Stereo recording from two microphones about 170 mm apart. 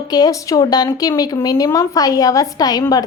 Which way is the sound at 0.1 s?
20° left (ahead or behind).